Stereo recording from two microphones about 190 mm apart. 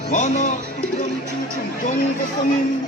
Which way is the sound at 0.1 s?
40° left (ahead or behind).